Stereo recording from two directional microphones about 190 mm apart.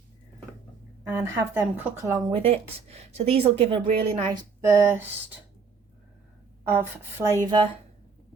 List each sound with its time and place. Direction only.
1.0 s a woman's voice: 15° right (ahead or behind)
2.3 s speech: 30° right (ahead or behind)
4.3 s a woman's voice: 15° right (ahead or behind)
6.7 s a woman's voice: 10° right (ahead or behind)